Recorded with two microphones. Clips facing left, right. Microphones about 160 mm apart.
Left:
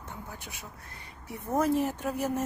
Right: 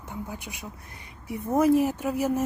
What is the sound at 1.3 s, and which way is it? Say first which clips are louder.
Speech: right 6 dB; 10° right (ahead or behind).